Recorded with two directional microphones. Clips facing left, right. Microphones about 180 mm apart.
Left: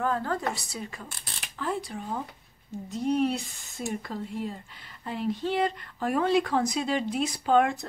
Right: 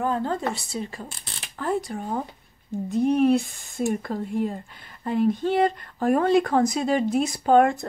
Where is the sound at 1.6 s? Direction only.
45° right (ahead or behind).